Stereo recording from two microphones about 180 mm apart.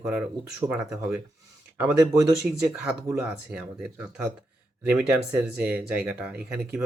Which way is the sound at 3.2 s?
5° right (ahead or behind).